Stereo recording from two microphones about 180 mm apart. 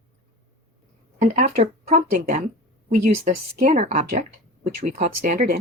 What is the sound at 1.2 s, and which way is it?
Speech, 45° right (ahead or behind).